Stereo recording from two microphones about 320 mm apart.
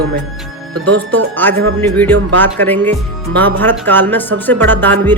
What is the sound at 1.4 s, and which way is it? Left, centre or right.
Speech, centre.